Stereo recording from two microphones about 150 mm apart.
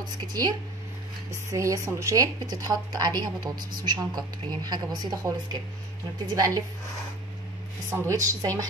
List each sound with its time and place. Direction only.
0.3 s a woman's voice: 25° right (ahead or behind)
7.9 s a woman's voice: 20° right (ahead or behind)